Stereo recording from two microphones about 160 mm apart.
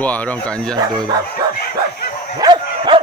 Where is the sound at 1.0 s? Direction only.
25° right (ahead or behind).